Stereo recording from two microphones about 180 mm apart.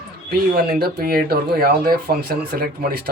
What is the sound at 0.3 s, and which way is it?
A man's voice, 60° right (ahead or behind).